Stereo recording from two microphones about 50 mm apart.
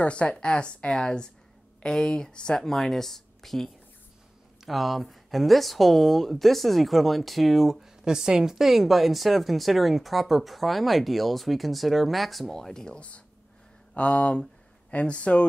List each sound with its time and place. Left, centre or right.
0.0 s speech: left